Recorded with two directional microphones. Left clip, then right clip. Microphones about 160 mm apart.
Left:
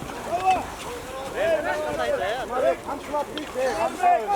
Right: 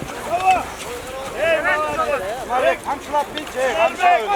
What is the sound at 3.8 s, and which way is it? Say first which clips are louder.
Speech: right 6 dB; 25° right (ahead or behind).